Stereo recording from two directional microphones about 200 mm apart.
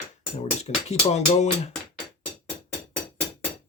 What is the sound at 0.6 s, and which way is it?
Speech, 35° left (ahead or behind).